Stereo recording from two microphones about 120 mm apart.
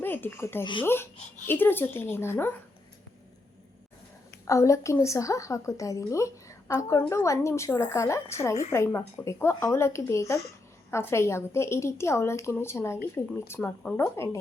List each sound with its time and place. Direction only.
0.0 s speech: 15° left (ahead or behind)
0.6 s speech: 45° left (ahead or behind)
1.5 s speech: 15° left (ahead or behind)
4.4 s a woman's voice: 25° left (ahead or behind)